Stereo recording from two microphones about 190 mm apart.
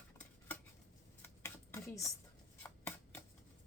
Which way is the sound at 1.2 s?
15° left (ahead or behind).